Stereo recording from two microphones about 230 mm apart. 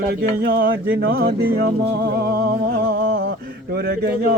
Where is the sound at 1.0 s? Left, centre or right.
Right.